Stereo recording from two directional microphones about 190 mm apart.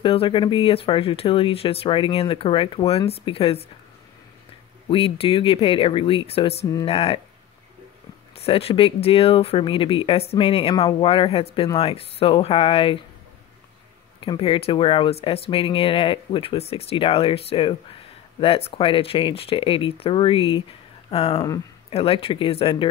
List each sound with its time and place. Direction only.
0.0 s speech: 30° left (ahead or behind)
4.8 s speech: 30° left (ahead or behind)
8.4 s speech: 30° left (ahead or behind)
14.2 s speech: 30° left (ahead or behind)